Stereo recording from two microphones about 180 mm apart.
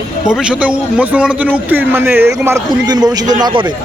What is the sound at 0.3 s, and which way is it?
A man's voice, 5° right (ahead or behind).